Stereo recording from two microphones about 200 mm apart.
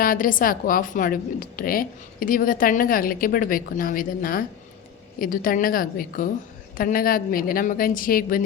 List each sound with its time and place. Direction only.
0.0 s a woman's voice: 45° left (ahead or behind)